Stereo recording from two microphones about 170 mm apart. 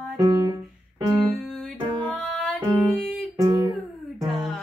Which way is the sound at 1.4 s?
5° left (ahead or behind).